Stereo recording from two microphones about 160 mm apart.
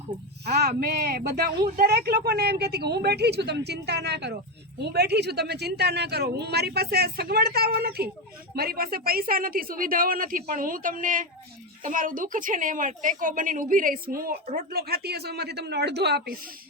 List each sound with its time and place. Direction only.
0.4 s speech: 80° right
0.7 s a woman's voice: 70° right (ahead or behind); by 16.2 s 90° right